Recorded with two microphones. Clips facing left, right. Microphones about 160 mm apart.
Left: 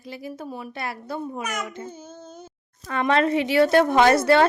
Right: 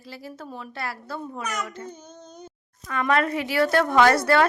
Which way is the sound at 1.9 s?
5° left (ahead or behind).